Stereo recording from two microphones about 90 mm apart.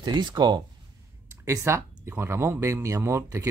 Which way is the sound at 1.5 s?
30° right (ahead or behind).